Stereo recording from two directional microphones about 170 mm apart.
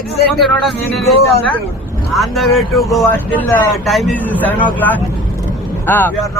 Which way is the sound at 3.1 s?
10° left (ahead or behind).